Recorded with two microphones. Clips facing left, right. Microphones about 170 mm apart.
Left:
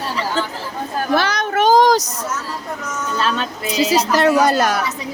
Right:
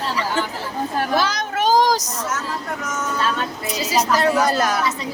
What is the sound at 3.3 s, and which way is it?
A woman's voice, 75° left (ahead or behind).